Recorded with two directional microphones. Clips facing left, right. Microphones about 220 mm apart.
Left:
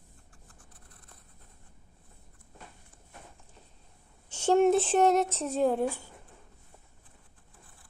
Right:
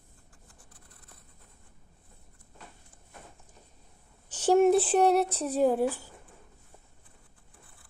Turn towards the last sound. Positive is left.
turn(degrees=-5)  # may be behind; listen again after turning